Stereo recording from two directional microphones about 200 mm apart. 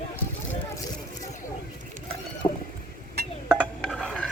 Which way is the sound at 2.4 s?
30° left (ahead or behind).